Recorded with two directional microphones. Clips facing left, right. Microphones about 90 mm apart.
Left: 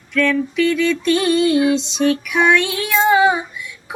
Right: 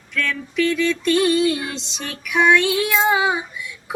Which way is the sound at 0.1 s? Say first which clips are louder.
Left 8 dB; centre (ahead or behind).